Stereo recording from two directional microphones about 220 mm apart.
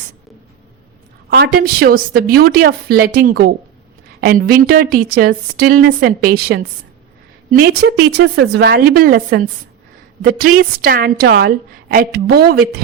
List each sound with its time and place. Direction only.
1.3 s a woman's voice: 45° right (ahead or behind)
7.7 s a woman's voice: 45° right (ahead or behind)